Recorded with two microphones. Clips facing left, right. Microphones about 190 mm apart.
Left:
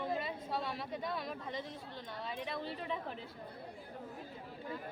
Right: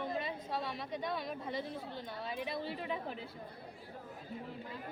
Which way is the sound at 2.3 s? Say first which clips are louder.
Right 2 dB; 5° right (ahead or behind).